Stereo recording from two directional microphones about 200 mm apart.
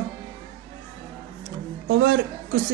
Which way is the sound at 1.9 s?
70° right (ahead or behind).